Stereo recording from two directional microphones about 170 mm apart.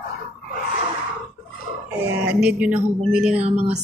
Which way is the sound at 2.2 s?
10° right (ahead or behind).